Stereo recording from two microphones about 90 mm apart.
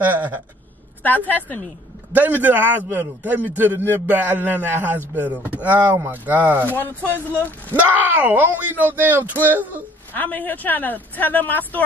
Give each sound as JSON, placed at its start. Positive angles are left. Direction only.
{"t": 0.0, "sound": "speech", "side_deg": -20}
{"t": 1.0, "sound": "speech", "side_deg": 20}
{"t": 2.1, "sound": "a man's voice", "side_deg": -20}
{"t": 7.1, "sound": "speech", "side_deg": 20}
{"t": 7.8, "sound": "a man's voice", "side_deg": -20}
{"t": 10.1, "sound": "speech", "side_deg": 20}